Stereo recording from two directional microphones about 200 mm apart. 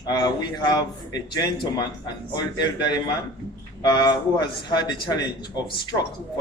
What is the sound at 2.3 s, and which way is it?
Speech, 20° left (ahead or behind).